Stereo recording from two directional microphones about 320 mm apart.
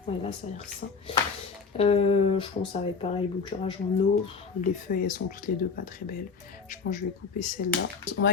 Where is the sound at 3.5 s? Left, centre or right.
Left.